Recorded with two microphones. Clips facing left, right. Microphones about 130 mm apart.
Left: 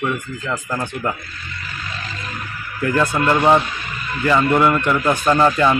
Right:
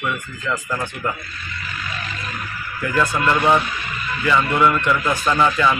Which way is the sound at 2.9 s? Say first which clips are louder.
Left 1 dB; 35° left (ahead or behind).